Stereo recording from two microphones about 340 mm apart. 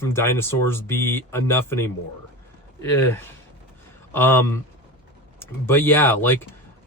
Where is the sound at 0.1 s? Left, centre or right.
Centre.